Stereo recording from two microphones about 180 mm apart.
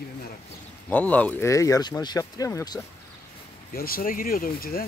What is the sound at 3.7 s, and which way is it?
Speech, 55° left (ahead or behind).